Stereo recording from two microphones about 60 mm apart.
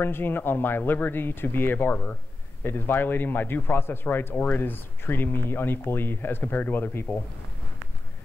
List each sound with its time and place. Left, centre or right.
0.0 s speech: left